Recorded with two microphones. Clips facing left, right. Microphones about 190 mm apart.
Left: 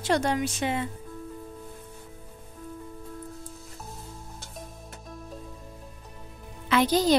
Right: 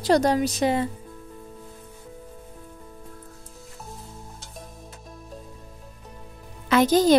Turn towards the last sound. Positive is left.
turn(degrees=-45)  # may be behind; listen again after turning